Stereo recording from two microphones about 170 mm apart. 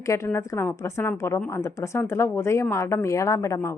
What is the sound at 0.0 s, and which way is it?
Speech, 15° left (ahead or behind).